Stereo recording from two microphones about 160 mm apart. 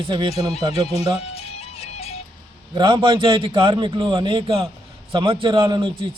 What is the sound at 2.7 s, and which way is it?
A man's voice, 30° right (ahead or behind).